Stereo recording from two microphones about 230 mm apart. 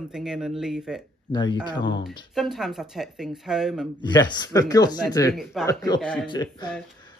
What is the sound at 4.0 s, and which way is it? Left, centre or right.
Speech, centre.